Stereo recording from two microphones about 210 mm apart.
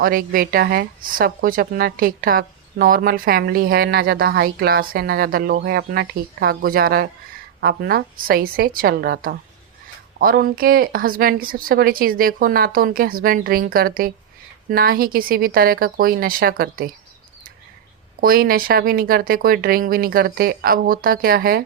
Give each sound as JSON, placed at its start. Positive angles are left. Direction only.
{"t": 0.0, "sound": "a woman's voice", "side_deg": -45}
{"t": 18.2, "sound": "a woman's voice", "side_deg": -45}